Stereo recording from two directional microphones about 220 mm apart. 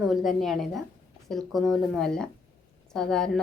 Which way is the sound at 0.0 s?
Centre (ahead or behind).